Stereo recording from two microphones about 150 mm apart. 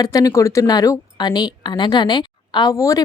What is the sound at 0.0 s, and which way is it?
A woman's voice, 25° left (ahead or behind).